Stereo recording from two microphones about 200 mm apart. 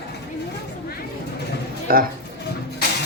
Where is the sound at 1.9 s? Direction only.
45° right (ahead or behind).